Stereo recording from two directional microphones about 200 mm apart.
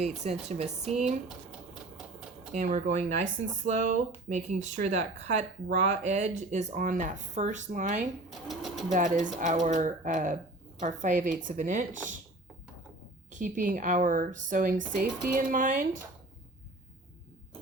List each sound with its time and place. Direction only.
0.0 s speech: 35° right (ahead or behind)
1.3 s typewriter: 5° right (ahead or behind)
2.5 s speech: 40° right (ahead or behind)
8.3 s speech: centre (ahead or behind)
8.9 s speech: 40° right (ahead or behind)
13.3 s speech: 40° right (ahead or behind)